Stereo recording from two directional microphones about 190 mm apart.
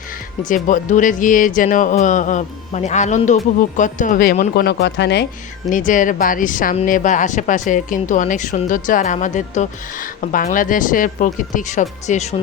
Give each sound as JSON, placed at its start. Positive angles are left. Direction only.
{"t": 0.4, "sound": "speech", "side_deg": 40}
{"t": 5.7, "sound": "speech", "side_deg": 45}